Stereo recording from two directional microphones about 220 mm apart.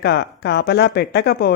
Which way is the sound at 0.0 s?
50° left (ahead or behind).